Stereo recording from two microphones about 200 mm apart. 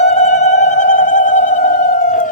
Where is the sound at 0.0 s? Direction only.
35° left (ahead or behind).